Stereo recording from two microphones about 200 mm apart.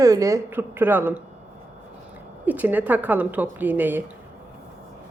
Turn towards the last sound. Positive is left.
turn(degrees=-10)  # may be behind; listen again after turning